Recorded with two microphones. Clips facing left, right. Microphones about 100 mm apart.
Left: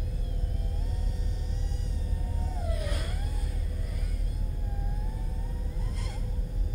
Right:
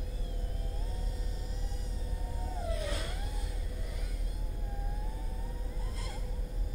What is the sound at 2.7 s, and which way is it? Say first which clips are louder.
Vehicle: left 1 dB; 25° right (ahead or behind).